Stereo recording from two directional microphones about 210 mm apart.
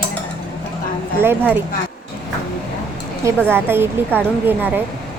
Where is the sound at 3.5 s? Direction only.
10° right (ahead or behind).